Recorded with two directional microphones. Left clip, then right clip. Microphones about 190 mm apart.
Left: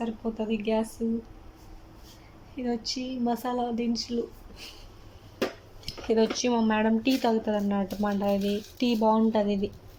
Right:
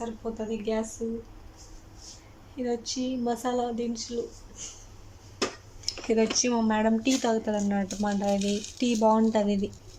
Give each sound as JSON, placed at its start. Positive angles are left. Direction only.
{"t": 0.0, "sound": "speech", "side_deg": 0}
{"t": 2.6, "sound": "speech", "side_deg": 0}
{"t": 6.0, "sound": "speech", "side_deg": -5}